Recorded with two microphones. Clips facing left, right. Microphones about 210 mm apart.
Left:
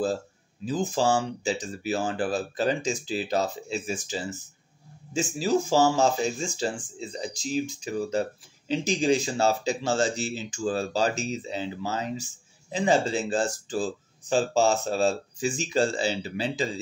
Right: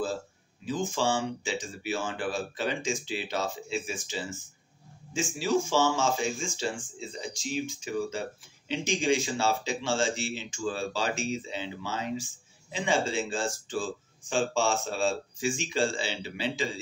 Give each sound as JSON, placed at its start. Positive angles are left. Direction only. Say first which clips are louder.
{"t": 0.7, "sound": "speech", "louder": "left 4 dB", "side_deg": 35}